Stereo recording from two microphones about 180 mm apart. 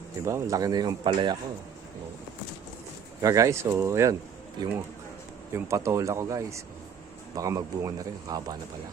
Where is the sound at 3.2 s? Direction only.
15° right (ahead or behind).